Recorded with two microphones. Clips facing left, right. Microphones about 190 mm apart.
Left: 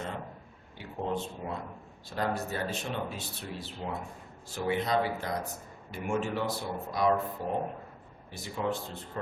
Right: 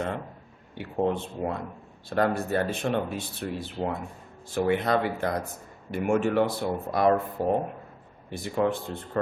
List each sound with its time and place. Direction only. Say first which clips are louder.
0.8 s speech: right 7 dB; 60° right (ahead or behind)
8.3 s speech: right 7 dB; 55° right (ahead or behind)